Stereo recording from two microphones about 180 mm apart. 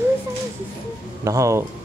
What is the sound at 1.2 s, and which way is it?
Speech, 15° right (ahead or behind).